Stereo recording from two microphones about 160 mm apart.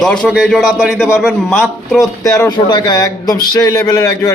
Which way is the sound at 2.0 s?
20° left (ahead or behind).